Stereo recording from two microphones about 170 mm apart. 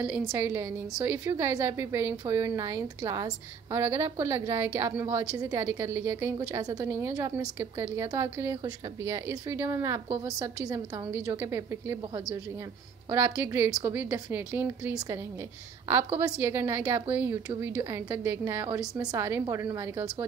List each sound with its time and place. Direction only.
0.0 s a woman's voice: 10° right (ahead or behind)